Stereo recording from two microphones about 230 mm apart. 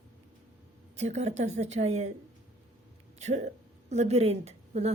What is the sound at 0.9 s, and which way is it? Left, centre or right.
Speech, right.